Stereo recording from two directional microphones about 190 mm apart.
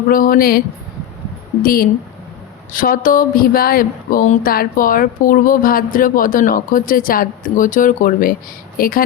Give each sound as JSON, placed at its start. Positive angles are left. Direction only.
{"t": 0.1, "sound": "speech", "side_deg": 45}
{"t": 1.6, "sound": "speech", "side_deg": 50}